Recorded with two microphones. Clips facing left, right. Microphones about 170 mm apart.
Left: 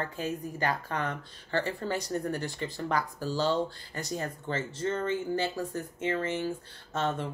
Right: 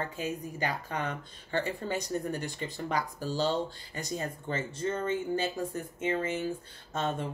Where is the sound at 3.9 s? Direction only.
20° right (ahead or behind).